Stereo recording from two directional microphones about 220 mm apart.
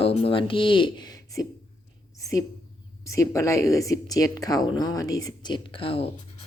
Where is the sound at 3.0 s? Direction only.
15° left (ahead or behind).